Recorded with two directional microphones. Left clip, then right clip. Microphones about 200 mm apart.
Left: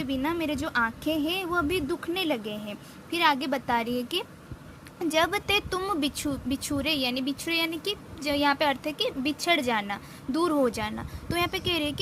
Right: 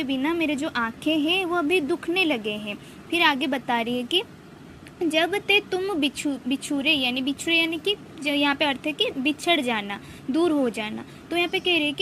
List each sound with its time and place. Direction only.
0.2 s a woman's voice: 10° left (ahead or behind)
5.0 s a woman's voice: 20° left (ahead or behind)